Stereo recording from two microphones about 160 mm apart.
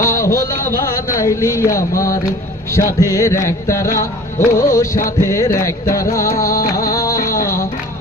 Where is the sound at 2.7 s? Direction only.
20° left (ahead or behind).